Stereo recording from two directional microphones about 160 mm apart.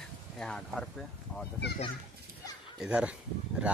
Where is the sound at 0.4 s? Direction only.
5° left (ahead or behind).